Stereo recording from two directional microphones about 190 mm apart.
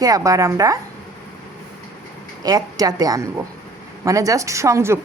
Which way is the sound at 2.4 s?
20° right (ahead or behind).